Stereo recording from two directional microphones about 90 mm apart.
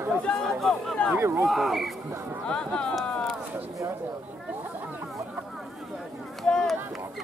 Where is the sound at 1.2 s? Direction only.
30° right (ahead or behind).